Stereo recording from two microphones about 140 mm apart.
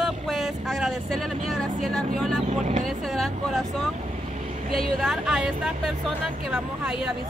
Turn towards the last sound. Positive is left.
turn(degrees=-5)  # may be behind; listen again after turning